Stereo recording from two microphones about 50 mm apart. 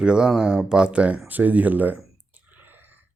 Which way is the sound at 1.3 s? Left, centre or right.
Right.